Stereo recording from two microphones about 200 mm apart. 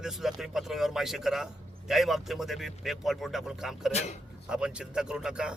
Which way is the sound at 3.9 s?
35° left (ahead or behind).